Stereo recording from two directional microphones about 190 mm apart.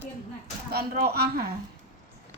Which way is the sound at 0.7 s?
55° right (ahead or behind).